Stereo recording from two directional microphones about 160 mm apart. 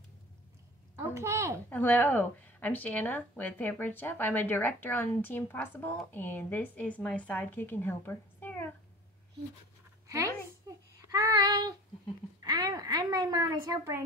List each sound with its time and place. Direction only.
0.9 s a child's voice: 15° right (ahead or behind)
1.7 s speech: 10° left (ahead or behind)
10.7 s child singing: 20° right (ahead or behind)
12.4 s a sound: 25° right (ahead or behind)
13.7 s a child's voice: 15° right (ahead or behind)